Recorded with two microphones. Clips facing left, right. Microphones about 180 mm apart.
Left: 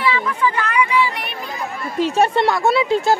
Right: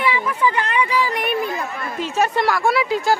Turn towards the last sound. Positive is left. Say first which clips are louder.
# left 2 dB
turn(degrees=25)  # may be behind; listen again after turning